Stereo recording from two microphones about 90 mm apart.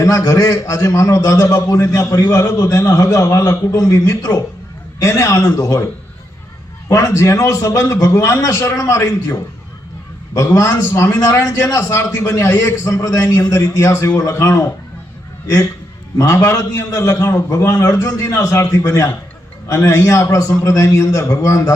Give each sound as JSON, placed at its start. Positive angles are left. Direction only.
{"t": 0.0, "sound": "a man's voice", "side_deg": 35}
{"t": 16.1, "sound": "a man's voice", "side_deg": 40}